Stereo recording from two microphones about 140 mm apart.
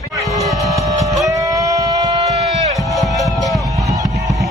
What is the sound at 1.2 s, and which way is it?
Sheep, 25° right (ahead or behind).